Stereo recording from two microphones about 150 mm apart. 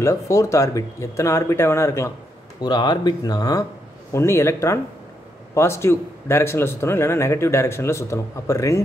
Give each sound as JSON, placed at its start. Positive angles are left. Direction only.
{"t": 0.0, "sound": "speech", "side_deg": 20}
{"t": 2.6, "sound": "a man's voice", "side_deg": 30}